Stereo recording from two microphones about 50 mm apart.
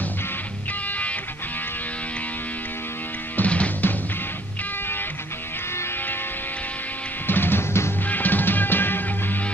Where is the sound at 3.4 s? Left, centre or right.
Left.